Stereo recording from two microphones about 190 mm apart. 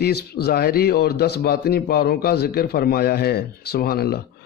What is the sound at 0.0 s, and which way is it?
Speech, 55° left (ahead or behind).